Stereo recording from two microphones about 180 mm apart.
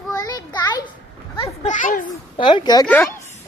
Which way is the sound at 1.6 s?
45° left (ahead or behind).